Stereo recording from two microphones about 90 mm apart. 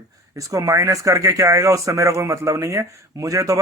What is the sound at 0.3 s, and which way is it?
Speech, 40° right (ahead or behind).